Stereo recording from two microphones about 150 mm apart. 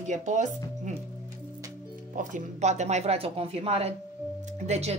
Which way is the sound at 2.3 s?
50° right (ahead or behind).